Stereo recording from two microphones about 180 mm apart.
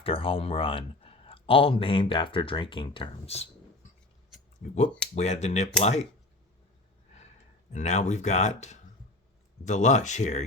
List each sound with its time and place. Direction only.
0.0 s speech: 30° left (ahead or behind)
4.6 s speech: 40° left (ahead or behind)
7.7 s speech: 40° left (ahead or behind)